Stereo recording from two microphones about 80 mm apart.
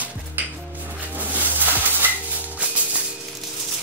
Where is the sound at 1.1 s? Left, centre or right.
Right.